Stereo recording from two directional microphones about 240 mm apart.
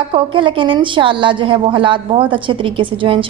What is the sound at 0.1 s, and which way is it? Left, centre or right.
A woman's voice, right.